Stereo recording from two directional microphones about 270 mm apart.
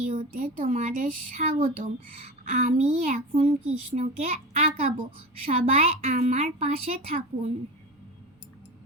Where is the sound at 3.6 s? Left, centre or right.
Right.